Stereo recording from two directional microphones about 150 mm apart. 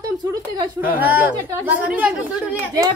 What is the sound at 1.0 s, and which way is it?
A woman's voice, 10° right (ahead or behind).